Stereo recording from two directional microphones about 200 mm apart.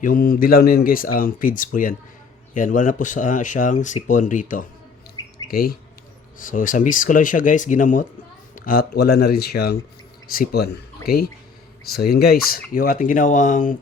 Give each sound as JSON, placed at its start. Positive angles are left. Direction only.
{"t": 0.0, "sound": "speech", "side_deg": 45}